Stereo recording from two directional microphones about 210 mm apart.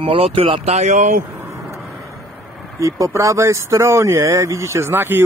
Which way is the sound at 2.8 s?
15° right (ahead or behind).